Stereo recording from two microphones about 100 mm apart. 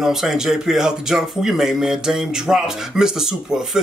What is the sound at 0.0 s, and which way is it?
Speech, 5° right (ahead or behind).